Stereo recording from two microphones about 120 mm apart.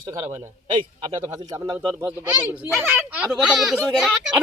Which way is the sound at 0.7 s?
40° right (ahead or behind).